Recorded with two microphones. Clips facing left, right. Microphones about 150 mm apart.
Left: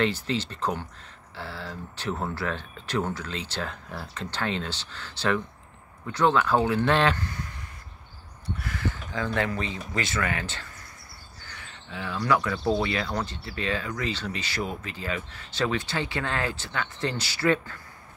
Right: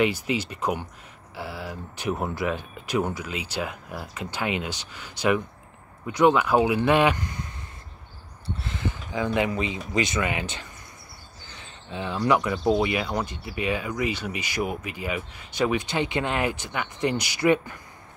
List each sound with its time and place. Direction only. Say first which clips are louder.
0.0 s speech: right 2 dB; 10° right (ahead or behind)
8.5 s speech: even; 20° right (ahead or behind)